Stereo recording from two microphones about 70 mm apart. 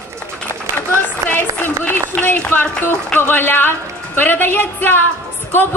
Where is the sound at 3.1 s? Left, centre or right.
Left.